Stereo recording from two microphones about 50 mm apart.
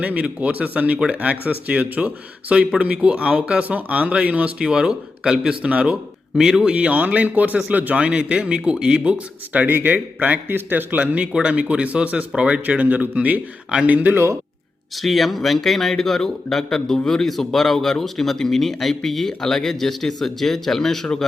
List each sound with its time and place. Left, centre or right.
0.0 s a man's voice: right
4.7 s a man's voice: centre
6.3 s speech: centre
6.7 s a man's voice: right
11.0 s a man's voice: right
11.3 s a man's voice: centre; by 14.2 s right
15.0 s speech: centre